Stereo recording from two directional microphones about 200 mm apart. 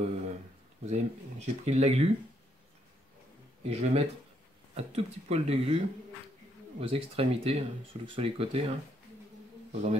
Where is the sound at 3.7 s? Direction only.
30° right (ahead or behind).